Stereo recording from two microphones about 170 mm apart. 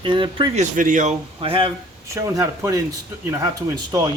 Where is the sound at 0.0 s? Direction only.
30° right (ahead or behind).